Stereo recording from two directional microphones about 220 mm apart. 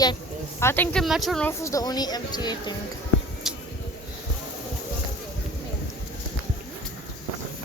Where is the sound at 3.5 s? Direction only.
Centre (ahead or behind).